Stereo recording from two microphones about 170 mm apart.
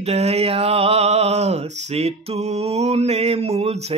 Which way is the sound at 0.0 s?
40° right (ahead or behind).